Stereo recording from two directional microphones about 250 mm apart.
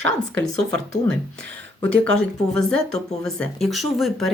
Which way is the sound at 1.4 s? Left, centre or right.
Right.